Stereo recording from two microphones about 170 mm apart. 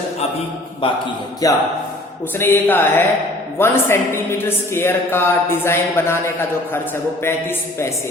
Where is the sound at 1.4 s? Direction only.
20° left (ahead or behind).